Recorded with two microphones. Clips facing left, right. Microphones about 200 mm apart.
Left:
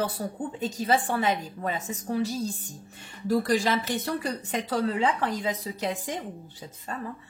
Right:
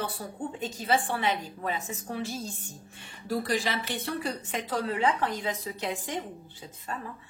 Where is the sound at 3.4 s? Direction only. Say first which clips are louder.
Left 5 dB; 50° left (ahead or behind).